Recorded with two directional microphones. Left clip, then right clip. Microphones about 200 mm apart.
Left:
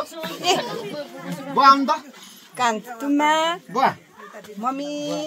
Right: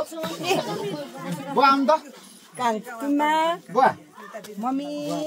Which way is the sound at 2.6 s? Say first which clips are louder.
Left 3 dB; 10° left (ahead or behind).